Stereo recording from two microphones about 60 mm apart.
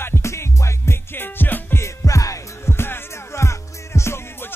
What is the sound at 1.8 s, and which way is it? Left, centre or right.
Music, left.